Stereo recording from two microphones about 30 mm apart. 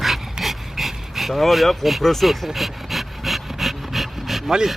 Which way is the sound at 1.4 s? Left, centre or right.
Centre.